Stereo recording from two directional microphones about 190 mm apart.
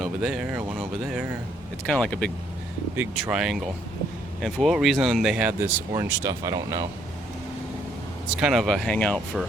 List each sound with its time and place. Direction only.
0.0 s speech: 5° right (ahead or behind)
2.9 s speech: 10° right (ahead or behind)
8.4 s speech: centre (ahead or behind)